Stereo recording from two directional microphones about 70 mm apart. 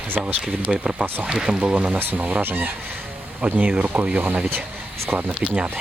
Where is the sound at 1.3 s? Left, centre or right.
Centre.